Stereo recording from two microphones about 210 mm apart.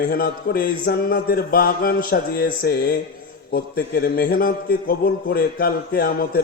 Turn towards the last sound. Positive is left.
turn(degrees=45)  # may be behind; listen again after turning